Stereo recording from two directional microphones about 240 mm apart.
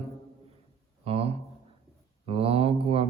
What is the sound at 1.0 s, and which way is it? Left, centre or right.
Speech, right.